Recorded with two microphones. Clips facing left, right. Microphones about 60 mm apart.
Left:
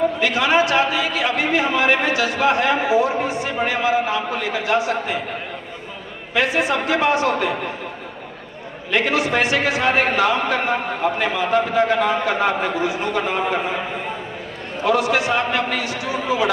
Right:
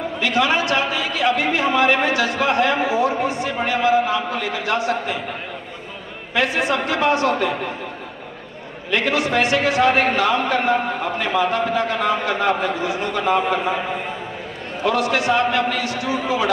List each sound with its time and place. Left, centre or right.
0.2 s a man's voice: left
6.3 s a man's voice: centre
8.9 s a man's voice: left
14.9 s a man's voice: left